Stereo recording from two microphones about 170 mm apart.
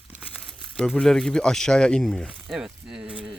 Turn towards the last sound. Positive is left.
turn(degrees=-5)  # may be behind; listen again after turning